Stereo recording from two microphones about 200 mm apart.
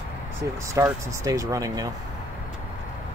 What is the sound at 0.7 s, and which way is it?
Speech, 15° right (ahead or behind).